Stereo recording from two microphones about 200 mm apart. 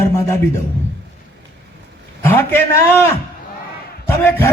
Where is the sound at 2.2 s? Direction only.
10° left (ahead or behind).